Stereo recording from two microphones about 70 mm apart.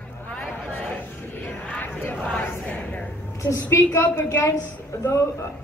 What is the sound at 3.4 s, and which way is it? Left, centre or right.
A woman's voice, left.